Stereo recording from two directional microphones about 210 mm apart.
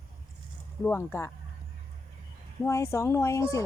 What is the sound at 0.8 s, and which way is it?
Speech, 10° left (ahead or behind).